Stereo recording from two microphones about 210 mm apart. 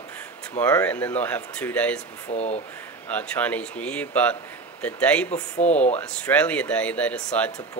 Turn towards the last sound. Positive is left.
turn(degrees=5)  # may be behind; listen again after turning